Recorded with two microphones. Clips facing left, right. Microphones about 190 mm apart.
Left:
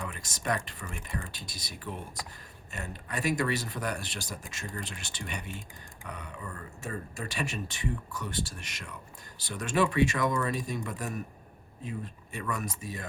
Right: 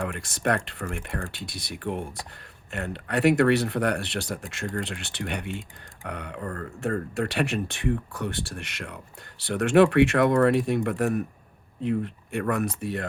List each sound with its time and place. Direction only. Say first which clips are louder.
0.0 s speech: right 8 dB; 65° right (ahead or behind)